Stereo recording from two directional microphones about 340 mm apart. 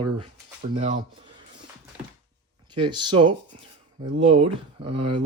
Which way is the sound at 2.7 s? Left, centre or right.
Centre.